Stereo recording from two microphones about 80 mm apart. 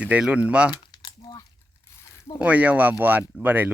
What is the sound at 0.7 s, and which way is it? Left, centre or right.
Crumpling, left.